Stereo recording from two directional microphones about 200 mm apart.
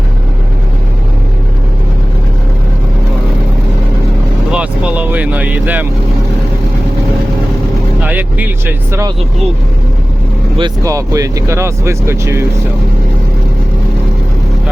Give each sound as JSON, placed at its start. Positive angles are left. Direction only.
{"t": 4.5, "sound": "vehicle", "side_deg": -5}
{"t": 8.0, "sound": "speech", "side_deg": -10}
{"t": 10.6, "sound": "speech", "side_deg": -15}